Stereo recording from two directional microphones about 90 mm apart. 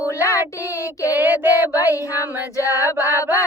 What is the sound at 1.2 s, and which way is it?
Child singing, 25° right (ahead or behind).